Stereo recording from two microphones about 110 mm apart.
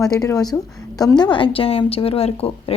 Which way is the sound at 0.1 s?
35° left (ahead or behind).